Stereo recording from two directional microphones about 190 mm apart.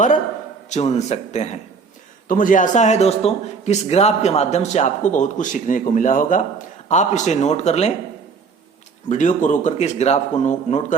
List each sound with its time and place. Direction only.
0.7 s a man's voice: 35° left (ahead or behind)
9.0 s a man's voice: 40° left (ahead or behind)